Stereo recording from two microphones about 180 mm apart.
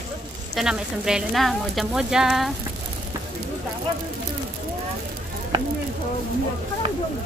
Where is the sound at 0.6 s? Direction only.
5° right (ahead or behind).